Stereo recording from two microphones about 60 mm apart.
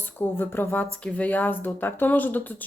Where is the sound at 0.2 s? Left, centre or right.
Left.